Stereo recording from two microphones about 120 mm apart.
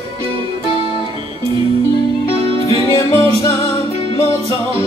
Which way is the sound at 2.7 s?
25° left (ahead or behind).